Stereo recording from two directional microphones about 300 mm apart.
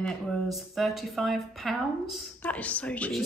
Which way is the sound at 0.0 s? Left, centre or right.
Centre.